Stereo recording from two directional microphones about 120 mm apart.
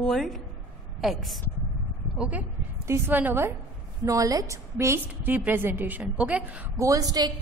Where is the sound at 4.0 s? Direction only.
30° right (ahead or behind); by 6.7 s 10° right (ahead or behind).